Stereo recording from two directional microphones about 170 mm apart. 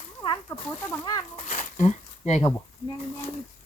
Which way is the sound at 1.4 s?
45° left (ahead or behind).